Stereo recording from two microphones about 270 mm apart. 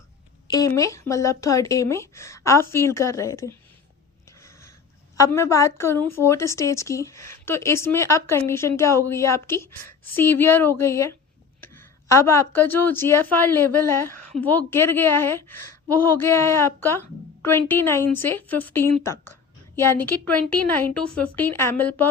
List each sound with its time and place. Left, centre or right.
0.4 s a woman's voice: centre
5.1 s a woman's voice: centre
11.6 s a sound: centre
12.9 s a woman's voice: centre
14.1 s a sound: left
14.4 s a woman's voice: centre